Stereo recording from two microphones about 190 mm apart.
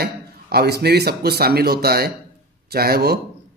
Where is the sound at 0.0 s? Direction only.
55° right (ahead or behind).